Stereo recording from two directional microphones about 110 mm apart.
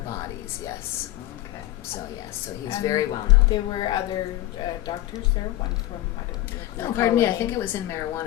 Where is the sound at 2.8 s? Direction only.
30° left (ahead or behind).